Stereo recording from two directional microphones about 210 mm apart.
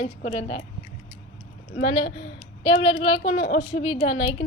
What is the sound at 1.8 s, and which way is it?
A woman's voice, 30° left (ahead or behind).